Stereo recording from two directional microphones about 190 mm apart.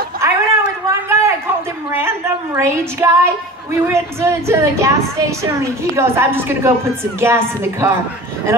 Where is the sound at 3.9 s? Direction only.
15° right (ahead or behind).